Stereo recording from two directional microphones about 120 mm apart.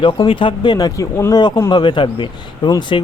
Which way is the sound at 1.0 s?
25° left (ahead or behind).